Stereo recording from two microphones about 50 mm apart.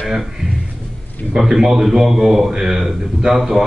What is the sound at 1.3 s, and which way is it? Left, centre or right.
A man's voice, centre.